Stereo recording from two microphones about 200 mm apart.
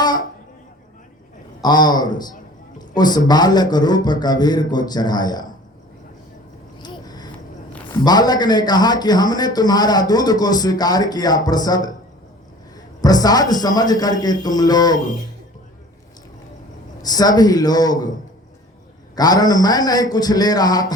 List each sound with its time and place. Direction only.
1.6 s a man's voice: 20° left (ahead or behind)
6.8 s a sound: 20° left (ahead or behind)
7.9 s a man's voice: 20° left (ahead or behind)
17.0 s a man's voice: 20° left (ahead or behind)
19.1 s a man's voice: 20° left (ahead or behind)